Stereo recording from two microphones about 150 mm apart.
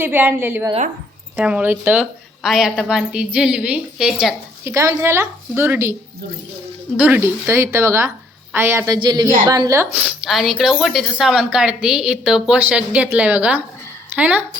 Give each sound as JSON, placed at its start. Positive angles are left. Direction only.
{"t": 0.0, "sound": "a woman's voice", "side_deg": -15}
{"t": 4.6, "sound": "a woman's voice", "side_deg": -20}
{"t": 6.9, "sound": "a woman's voice", "side_deg": -10}
{"t": 9.0, "sound": "a woman's voice", "side_deg": -30}